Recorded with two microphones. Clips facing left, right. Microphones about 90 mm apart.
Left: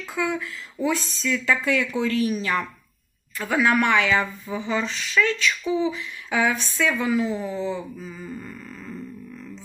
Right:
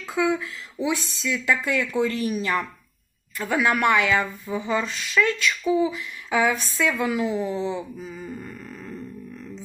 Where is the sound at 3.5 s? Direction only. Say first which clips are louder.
Even; 10° right (ahead or behind).